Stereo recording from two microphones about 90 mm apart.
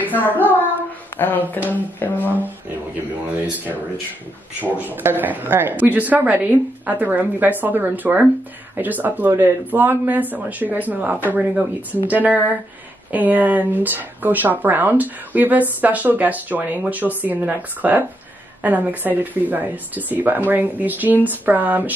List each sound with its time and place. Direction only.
0.1 s speech: 20° left (ahead or behind)
4.6 s speech: 20° right (ahead or behind)